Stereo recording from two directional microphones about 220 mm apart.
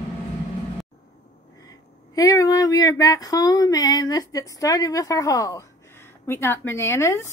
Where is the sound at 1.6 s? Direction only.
15° left (ahead or behind).